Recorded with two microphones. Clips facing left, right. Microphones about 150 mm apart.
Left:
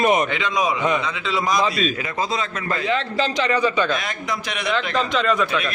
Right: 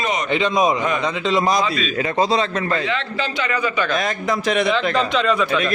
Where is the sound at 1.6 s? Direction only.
40° left (ahead or behind).